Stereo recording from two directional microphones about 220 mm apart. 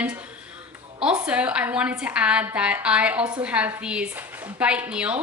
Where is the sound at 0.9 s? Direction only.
5° right (ahead or behind).